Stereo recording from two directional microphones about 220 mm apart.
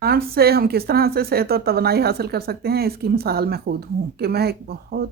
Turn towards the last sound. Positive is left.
turn(degrees=-45)  # may be behind; listen again after turning